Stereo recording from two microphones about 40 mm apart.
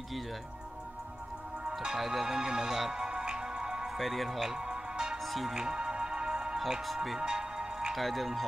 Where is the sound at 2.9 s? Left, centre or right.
Centre.